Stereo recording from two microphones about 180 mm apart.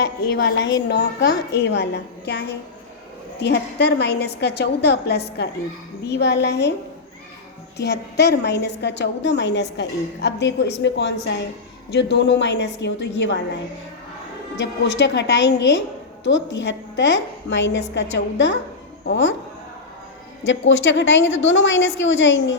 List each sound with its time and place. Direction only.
0.0 s a woman's voice: 60° left (ahead or behind)
7.8 s a woman's voice: 70° left (ahead or behind)
14.6 s a woman's voice: 80° left
16.2 s a woman's voice: 90° left
20.4 s a woman's voice: 90° left